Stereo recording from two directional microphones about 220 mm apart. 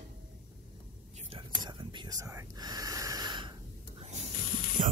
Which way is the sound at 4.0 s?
30° right (ahead or behind).